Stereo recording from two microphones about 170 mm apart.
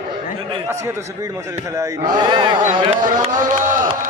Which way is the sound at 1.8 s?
25° right (ahead or behind).